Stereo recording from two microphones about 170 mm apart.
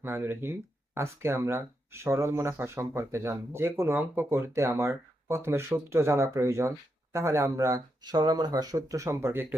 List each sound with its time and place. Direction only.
0.0 s speech: 10° right (ahead or behind)